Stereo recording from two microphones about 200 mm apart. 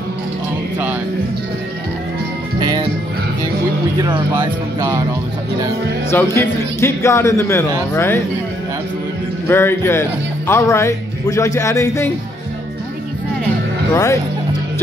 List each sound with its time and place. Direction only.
2.6 s music: 20° right (ahead or behind)
4.4 s speech: 15° right (ahead or behind)
6.0 s speech: 15° left (ahead or behind)
9.5 s speech: 10° left (ahead or behind)